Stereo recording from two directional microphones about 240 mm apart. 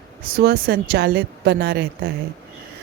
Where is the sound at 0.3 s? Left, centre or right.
Right.